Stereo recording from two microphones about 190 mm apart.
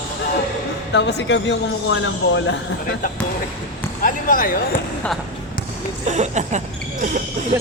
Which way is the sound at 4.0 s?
45° left (ahead or behind).